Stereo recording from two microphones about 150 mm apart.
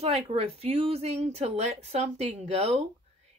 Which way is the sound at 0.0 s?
45° right (ahead or behind).